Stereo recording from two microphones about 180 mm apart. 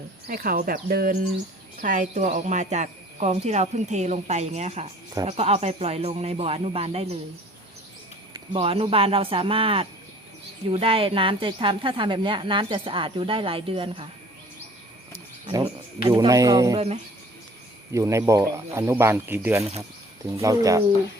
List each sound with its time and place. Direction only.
0.3 s speech: 55° right (ahead or behind); by 7.2 s 35° right (ahead or behind)
8.5 s speech: 35° right (ahead or behind)
15.4 s speech: 30° right (ahead or behind)
16.7 s speech: 35° right (ahead or behind)
17.9 s speech: 15° right (ahead or behind)